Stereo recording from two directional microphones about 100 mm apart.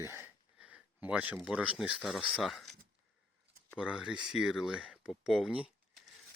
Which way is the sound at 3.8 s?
5° right (ahead or behind).